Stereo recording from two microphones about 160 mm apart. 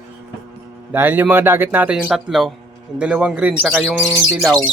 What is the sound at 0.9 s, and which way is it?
Speech, 10° right (ahead or behind).